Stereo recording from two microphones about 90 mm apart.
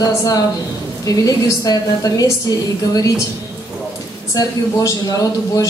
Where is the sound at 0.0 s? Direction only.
40° left (ahead or behind).